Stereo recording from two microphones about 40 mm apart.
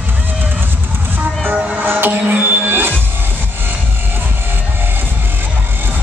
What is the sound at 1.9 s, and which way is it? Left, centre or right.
Music, right.